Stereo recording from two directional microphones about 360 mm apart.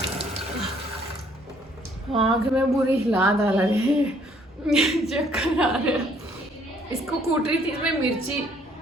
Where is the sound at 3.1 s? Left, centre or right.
Centre.